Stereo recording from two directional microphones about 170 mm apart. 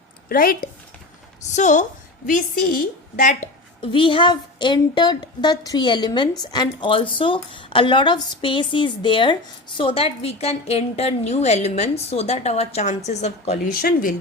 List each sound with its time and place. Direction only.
0.3 s speech: 55° left (ahead or behind)
1.5 s a woman's voice: 45° left (ahead or behind)
3.8 s a woman's voice: 30° left (ahead or behind)
13.7 s speech: 55° left (ahead or behind)